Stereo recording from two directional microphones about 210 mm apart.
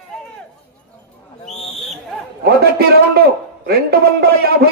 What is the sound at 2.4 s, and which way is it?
A man's voice, 50° right (ahead or behind).